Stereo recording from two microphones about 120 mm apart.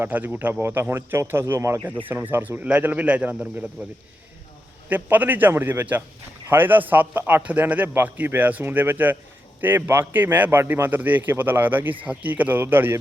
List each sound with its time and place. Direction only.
0.0 s a man's voice: 15° right (ahead or behind)
4.9 s a man's voice: 15° right (ahead or behind)